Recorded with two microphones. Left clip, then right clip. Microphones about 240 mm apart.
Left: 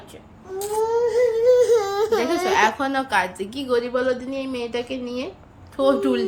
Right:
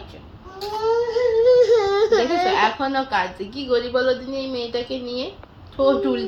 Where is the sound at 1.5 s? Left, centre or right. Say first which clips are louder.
Right 2 dB; left.